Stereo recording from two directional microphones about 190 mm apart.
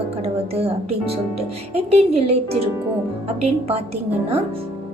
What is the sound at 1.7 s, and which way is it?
Speech, 30° right (ahead or behind).